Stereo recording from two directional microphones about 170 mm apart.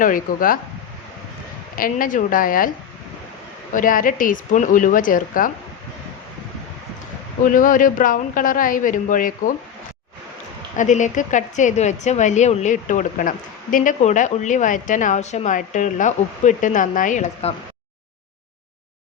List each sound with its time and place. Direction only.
0.0 s a woman's voice: 55° left (ahead or behind)
1.7 s a woman's voice: 55° left (ahead or behind)
3.7 s a woman's voice: 50° left (ahead or behind)
7.4 s a woman's voice: 55° left (ahead or behind)
10.8 s a woman's voice: 45° left (ahead or behind)